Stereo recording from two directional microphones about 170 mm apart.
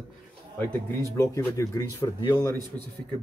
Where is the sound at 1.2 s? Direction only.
20° left (ahead or behind).